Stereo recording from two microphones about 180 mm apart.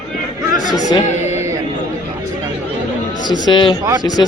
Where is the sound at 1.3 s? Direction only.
15° right (ahead or behind).